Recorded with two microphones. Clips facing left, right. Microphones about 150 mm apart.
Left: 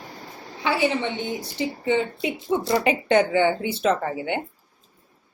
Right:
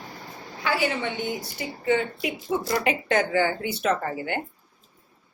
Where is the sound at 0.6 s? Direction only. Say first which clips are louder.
Left 3 dB; 20° left (ahead or behind).